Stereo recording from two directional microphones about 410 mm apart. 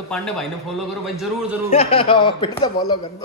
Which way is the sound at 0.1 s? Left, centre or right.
Centre.